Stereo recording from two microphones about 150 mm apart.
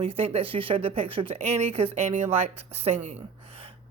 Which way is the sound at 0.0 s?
40° right (ahead or behind).